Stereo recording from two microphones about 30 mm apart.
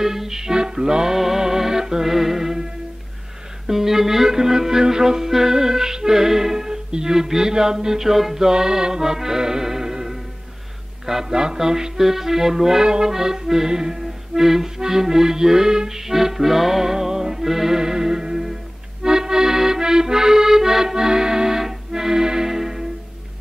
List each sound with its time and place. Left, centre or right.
0.0 s music: centre
1.1 s music: centre
3.6 s music: centre
8.5 s music: centre
13.0 s accordion: centre
14.8 s music: centre
19.0 s accordion: right